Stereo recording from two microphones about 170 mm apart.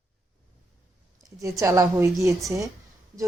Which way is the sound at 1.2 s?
20° right (ahead or behind).